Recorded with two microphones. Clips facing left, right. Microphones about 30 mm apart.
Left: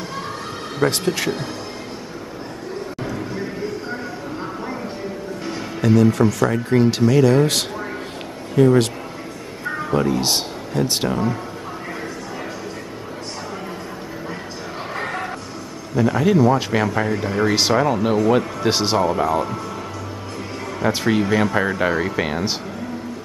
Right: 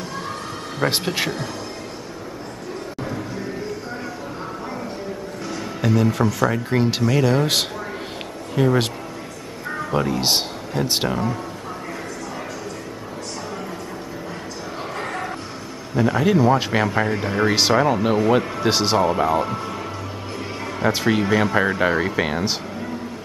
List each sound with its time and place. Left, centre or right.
0.8 s speech: centre
6.0 s speech: centre
9.7 s a sound: centre
9.9 s speech: centre
15.0 s a sound: centre
16.0 s speech: centre
19.0 s speech: centre
20.8 s speech: centre